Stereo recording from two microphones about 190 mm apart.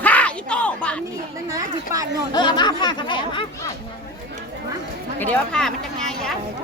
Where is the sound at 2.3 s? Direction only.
20° left (ahead or behind).